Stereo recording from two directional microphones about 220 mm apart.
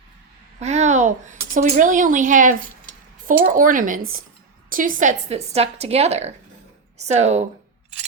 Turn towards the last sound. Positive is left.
turn(degrees=-30)  # may be behind; listen again after turning